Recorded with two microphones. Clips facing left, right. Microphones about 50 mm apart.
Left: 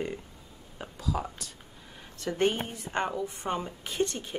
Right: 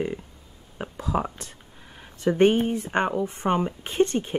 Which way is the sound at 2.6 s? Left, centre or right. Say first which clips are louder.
Right 7 dB; right.